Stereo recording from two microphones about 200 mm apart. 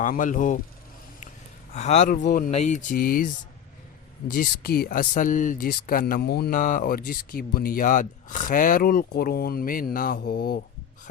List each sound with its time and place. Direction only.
0.0 s speech: 40° left (ahead or behind)
1.7 s speech: 35° left (ahead or behind); by 10.6 s 50° left (ahead or behind)